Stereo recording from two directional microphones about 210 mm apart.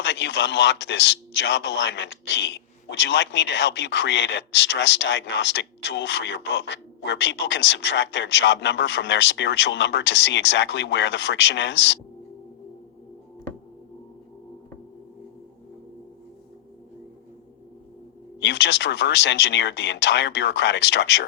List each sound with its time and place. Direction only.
0.0 s speech: 55° left (ahead or behind)
18.3 s speech: 55° left (ahead or behind)